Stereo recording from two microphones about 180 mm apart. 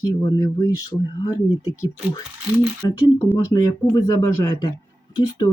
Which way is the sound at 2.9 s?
20° left (ahead or behind).